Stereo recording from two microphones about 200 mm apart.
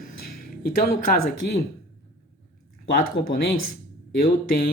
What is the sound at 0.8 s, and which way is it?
Speech, 50° left (ahead or behind).